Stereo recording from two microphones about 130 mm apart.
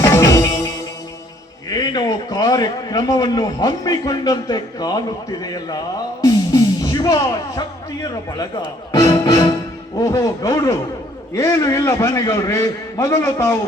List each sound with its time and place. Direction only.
0.0 s music: 25° left (ahead or behind)
1.7 s a man's voice: 30° left (ahead or behind)
6.2 s music: 30° left (ahead or behind)
8.9 s music: 30° left (ahead or behind)
10.1 s a man's voice: 30° left (ahead or behind)